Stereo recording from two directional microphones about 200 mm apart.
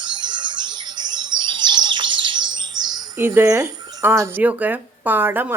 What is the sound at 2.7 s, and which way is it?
Speech, 20° right (ahead or behind).